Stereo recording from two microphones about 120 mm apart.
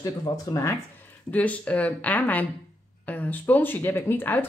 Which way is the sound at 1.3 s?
10° left (ahead or behind).